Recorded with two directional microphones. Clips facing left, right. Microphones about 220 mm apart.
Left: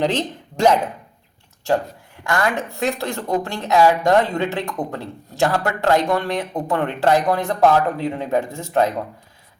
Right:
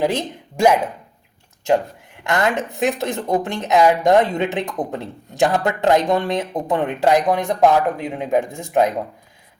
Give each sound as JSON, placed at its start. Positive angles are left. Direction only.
{"t": 0.0, "sound": "speech", "side_deg": -10}
{"t": 2.2, "sound": "speech", "side_deg": -20}